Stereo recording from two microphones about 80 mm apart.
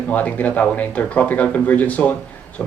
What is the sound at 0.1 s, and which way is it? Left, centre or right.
A man's voice, left.